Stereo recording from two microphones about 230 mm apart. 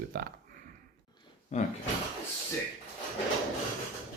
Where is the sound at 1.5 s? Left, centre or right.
Left.